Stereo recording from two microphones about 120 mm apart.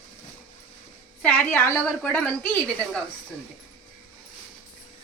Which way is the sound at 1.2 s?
15° left (ahead or behind).